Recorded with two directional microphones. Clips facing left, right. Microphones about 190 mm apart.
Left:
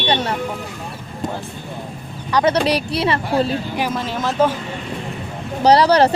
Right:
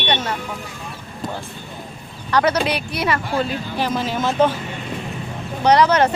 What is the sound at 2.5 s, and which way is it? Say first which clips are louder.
Speech: left 3 dB; 35° left (ahead or behind).